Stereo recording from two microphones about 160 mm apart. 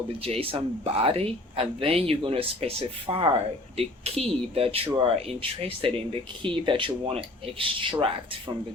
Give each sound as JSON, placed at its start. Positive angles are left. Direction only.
{"t": 0.2, "sound": "speech", "side_deg": -35}